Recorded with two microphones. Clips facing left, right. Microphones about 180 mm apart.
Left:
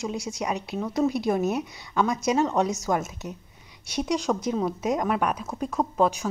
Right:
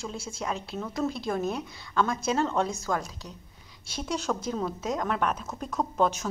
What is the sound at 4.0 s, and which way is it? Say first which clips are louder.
Speech: left 5 dB; centre (ahead or behind).